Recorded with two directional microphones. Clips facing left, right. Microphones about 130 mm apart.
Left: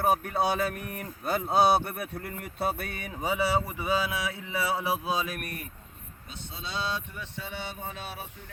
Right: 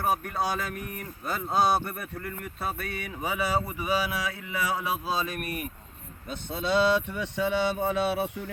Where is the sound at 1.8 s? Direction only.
60° left (ahead or behind).